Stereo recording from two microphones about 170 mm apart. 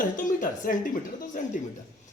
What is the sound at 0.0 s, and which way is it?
A woman's voice, 50° left (ahead or behind).